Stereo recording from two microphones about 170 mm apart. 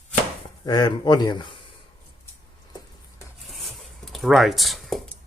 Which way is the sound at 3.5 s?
Centre (ahead or behind).